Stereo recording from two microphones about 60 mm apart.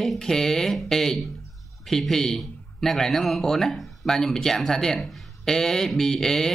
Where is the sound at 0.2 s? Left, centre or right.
Centre.